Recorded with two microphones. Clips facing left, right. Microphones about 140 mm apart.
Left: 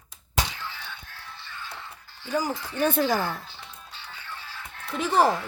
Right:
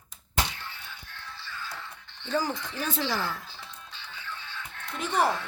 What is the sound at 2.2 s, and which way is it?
Speech, 15° left (ahead or behind).